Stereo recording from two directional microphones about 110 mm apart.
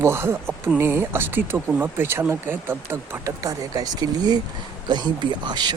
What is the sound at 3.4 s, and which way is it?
Speech, 35° right (ahead or behind).